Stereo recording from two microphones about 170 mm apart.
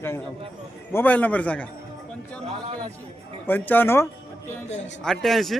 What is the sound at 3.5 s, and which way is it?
Speech, 10° left (ahead or behind).